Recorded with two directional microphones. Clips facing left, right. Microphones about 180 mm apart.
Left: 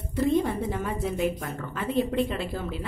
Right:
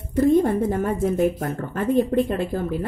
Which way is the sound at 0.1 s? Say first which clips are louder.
Right 7 dB; 45° right (ahead or behind).